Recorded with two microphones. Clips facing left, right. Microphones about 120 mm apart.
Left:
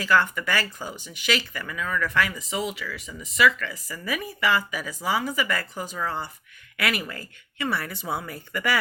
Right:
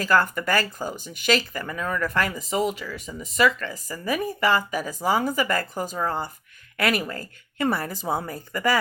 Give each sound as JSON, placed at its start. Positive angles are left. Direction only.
{"t": 0.0, "sound": "speech", "side_deg": -40}